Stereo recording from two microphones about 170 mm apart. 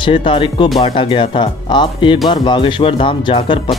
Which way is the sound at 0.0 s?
30° left (ahead or behind).